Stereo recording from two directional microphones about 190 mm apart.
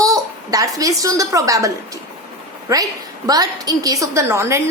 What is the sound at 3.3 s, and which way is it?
A woman's voice, 20° right (ahead or behind).